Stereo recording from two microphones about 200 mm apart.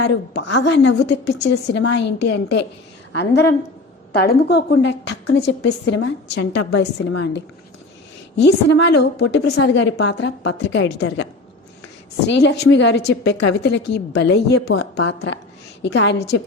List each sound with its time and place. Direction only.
0.0 s a woman's voice: 65° left (ahead or behind)
4.1 s a woman's voice: 50° left (ahead or behind)
8.4 s a woman's voice: 55° left (ahead or behind)
12.3 s a woman's voice: 60° left (ahead or behind)